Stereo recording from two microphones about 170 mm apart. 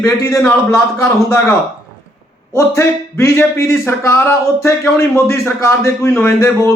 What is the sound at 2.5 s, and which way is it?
Speech, 15° left (ahead or behind).